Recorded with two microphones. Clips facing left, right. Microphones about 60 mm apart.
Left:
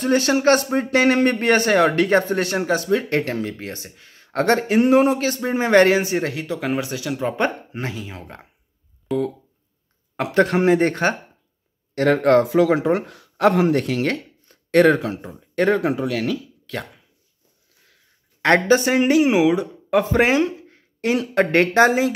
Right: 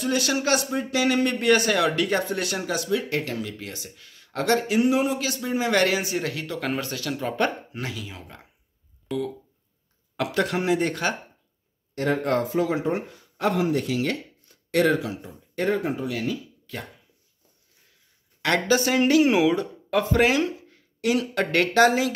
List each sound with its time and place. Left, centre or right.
0.0 s speech: left
6.4 s speech: centre; by 8.5 s left
10.1 s speech: left
11.9 s speech: left
18.4 s speech: left
18.8 s speech: left
19.9 s speech: left